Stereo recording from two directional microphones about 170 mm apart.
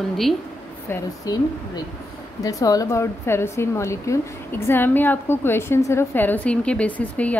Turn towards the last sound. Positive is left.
turn(degrees=10)  # may be behind; listen again after turning